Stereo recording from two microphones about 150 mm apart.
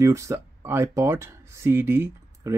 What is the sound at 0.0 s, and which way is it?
Speech, 20° right (ahead or behind).